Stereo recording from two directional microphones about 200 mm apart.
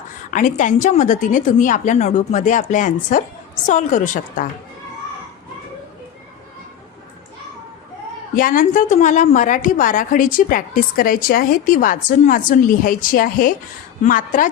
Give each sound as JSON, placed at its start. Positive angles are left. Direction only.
{"t": 0.3, "sound": "a woman's voice", "side_deg": 40}
{"t": 8.4, "sound": "a woman's voice", "side_deg": 45}